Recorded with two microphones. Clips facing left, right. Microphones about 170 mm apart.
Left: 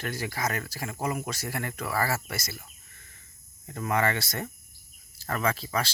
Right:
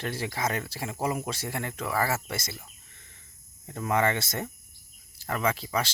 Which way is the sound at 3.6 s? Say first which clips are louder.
Right 1 dB; 20° right (ahead or behind).